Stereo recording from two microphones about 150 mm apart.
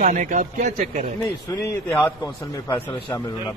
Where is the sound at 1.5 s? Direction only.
25° left (ahead or behind).